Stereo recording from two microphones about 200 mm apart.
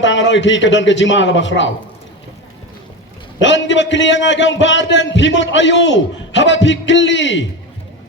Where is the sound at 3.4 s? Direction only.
65° left (ahead or behind).